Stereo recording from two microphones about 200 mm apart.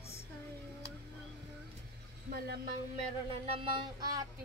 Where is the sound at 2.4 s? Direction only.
50° right (ahead or behind).